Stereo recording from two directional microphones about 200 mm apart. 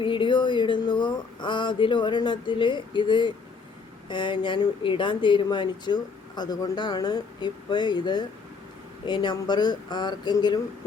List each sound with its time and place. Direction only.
0.0 s speech: 25° left (ahead or behind)